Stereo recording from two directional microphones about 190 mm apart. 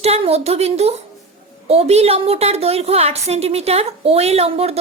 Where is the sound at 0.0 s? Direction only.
35° right (ahead or behind).